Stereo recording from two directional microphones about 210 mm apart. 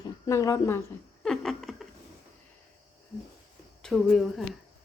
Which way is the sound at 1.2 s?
Centre (ahead or behind).